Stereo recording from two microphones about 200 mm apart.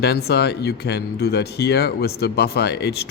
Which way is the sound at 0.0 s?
55° left (ahead or behind).